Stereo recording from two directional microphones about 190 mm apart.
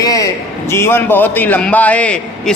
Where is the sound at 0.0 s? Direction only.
20° left (ahead or behind).